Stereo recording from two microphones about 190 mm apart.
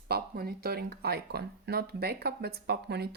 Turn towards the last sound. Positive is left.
turn(degrees=-55)  # may be behind; listen again after turning